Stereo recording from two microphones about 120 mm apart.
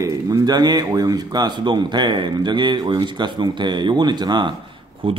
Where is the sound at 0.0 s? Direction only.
25° right (ahead or behind).